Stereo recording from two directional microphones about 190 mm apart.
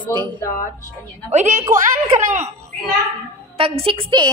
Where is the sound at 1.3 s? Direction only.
35° right (ahead or behind).